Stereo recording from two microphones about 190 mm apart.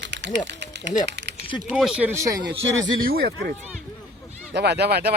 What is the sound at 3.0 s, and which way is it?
Speech, 55° right (ahead or behind).